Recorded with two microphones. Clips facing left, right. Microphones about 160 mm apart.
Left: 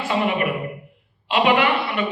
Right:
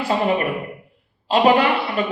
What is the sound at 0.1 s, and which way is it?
A man's voice, 35° right (ahead or behind).